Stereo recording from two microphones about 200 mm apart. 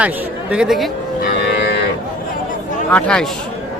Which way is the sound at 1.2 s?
55° left (ahead or behind).